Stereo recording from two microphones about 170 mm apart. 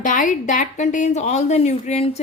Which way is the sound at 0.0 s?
50° left (ahead or behind).